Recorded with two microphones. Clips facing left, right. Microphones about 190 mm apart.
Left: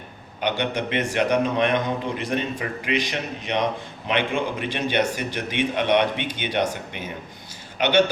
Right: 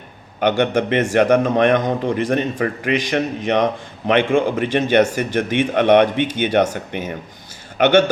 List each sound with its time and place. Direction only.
0.3 s a man's voice: 50° right (ahead or behind)